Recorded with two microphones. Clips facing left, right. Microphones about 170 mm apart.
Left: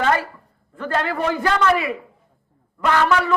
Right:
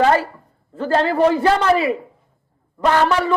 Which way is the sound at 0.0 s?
30° right (ahead or behind).